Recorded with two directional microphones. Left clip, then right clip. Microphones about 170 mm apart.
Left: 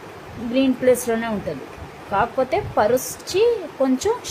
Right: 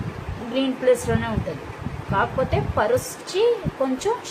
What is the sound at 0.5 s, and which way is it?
A woman's voice, 35° left (ahead or behind).